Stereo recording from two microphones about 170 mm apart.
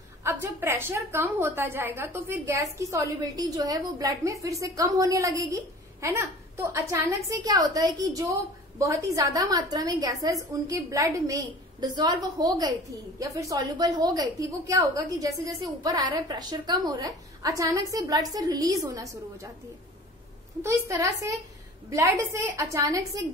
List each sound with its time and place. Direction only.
0.2 s a woman's voice: 15° right (ahead or behind)
20.6 s a woman's voice: 20° right (ahead or behind)